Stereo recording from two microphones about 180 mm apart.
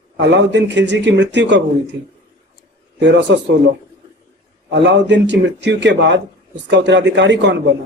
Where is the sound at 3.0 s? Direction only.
80° right.